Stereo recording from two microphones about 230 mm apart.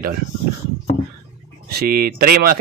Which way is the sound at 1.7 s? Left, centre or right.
Right.